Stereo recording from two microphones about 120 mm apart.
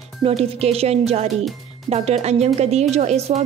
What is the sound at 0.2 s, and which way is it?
A woman's voice, 55° right (ahead or behind).